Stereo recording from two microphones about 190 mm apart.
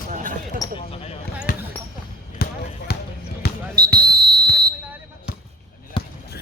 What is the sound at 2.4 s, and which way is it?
Basketball bounce, 55° left (ahead or behind).